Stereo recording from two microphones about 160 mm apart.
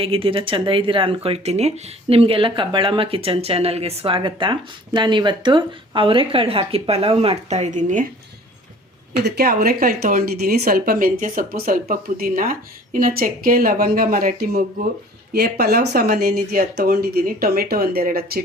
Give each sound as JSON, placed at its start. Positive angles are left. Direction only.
{"t": 0.0, "sound": "speech", "side_deg": -35}
{"t": 9.2, "sound": "speech", "side_deg": -75}
{"t": 15.3, "sound": "speech", "side_deg": -85}
{"t": 16.0, "sound": "speech", "side_deg": -70}